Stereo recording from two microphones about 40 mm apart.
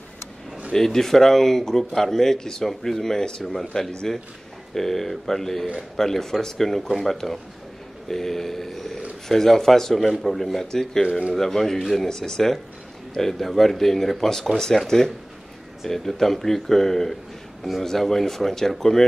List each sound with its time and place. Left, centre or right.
0.7 s speech: centre
11.1 s speech: right
11.3 s speech: centre